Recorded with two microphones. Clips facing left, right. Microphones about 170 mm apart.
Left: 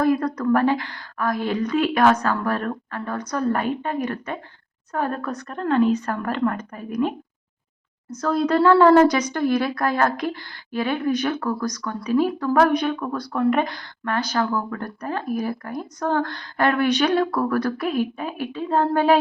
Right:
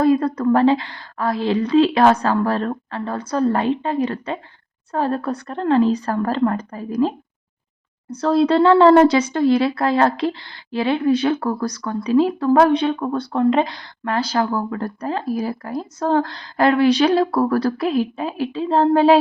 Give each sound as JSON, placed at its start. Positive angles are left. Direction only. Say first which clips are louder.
{"t": 0.0, "sound": "speech", "louder": "right 4 dB", "side_deg": -25}
{"t": 8.1, "sound": "speech", "louder": "right 4 dB", "side_deg": -30}